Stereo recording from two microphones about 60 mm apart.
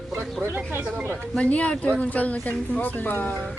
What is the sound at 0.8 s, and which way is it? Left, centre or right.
Speech, right.